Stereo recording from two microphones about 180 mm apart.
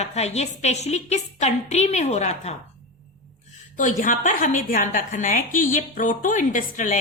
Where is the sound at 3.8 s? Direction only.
45° left (ahead or behind).